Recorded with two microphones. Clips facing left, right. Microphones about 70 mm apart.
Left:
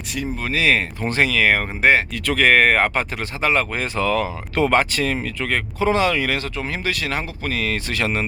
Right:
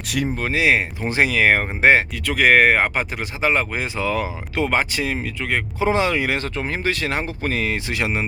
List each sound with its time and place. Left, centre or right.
0.5 s speech: centre
2.2 s speech: centre
4.5 s speech: centre; by 6.4 s right
6.4 s speech: right; by 8.3 s centre